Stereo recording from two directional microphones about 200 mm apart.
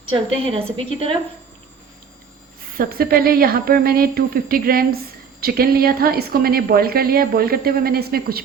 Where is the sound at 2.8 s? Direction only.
45° right (ahead or behind).